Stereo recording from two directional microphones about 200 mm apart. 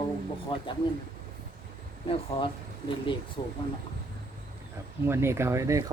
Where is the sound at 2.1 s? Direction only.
25° left (ahead or behind).